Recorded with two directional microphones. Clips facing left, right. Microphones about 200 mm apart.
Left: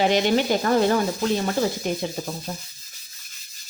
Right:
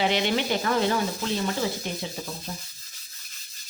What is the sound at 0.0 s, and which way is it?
Speech, 45° left (ahead or behind).